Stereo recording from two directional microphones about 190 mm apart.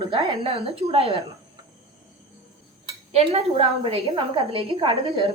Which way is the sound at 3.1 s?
30° right (ahead or behind).